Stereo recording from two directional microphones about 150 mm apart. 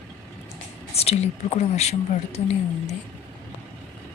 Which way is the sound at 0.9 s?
45° left (ahead or behind).